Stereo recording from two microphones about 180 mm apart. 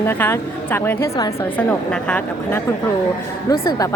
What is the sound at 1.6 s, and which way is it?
A woman's voice, 5° left (ahead or behind).